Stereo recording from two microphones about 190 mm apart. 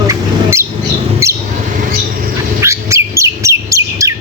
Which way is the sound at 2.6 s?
15° right (ahead or behind).